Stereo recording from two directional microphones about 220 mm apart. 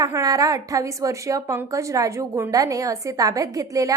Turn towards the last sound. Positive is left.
turn(degrees=-15)  # may be behind; listen again after turning